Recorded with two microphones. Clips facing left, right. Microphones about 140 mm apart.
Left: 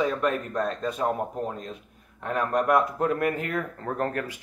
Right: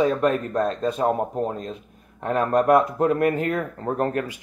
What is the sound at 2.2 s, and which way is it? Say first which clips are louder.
Speech: right 5 dB; 30° right (ahead or behind).